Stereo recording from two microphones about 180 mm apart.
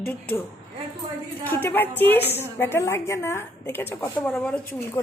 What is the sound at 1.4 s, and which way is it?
A woman's voice, 10° left (ahead or behind).